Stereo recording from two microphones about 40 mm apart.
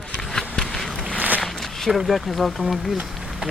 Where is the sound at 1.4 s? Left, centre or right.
Centre.